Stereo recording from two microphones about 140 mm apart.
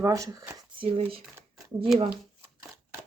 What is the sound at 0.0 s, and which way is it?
Speech, 25° right (ahead or behind).